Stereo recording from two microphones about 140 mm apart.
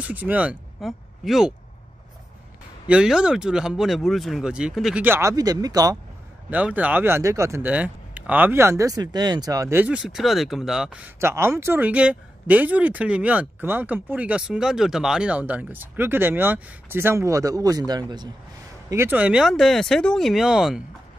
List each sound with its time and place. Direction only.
0.0 s speech: 10° right (ahead or behind)
2.9 s speech: 5° right (ahead or behind)
5.0 s speech: 20° right (ahead or behind)
6.5 s speech: 10° right (ahead or behind)
9.9 s speech: 5° right (ahead or behind)
11.1 s speech: 20° right (ahead or behind)
18.9 s speech: 15° right (ahead or behind)